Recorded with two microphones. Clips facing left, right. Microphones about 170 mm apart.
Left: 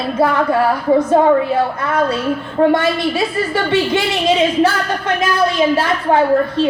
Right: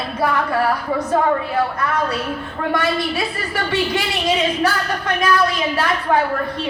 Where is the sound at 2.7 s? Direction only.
25° left (ahead or behind).